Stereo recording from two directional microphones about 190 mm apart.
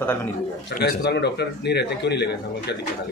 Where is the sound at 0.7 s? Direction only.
60° left (ahead or behind).